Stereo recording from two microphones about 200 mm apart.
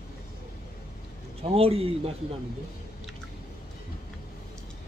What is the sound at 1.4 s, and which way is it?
Speech, 30° right (ahead or behind).